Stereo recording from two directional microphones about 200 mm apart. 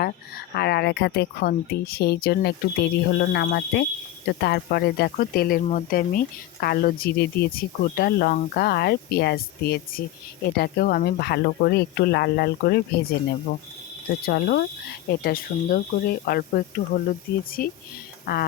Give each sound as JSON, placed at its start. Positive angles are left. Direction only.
{"t": 0.0, "sound": "speech", "side_deg": 50}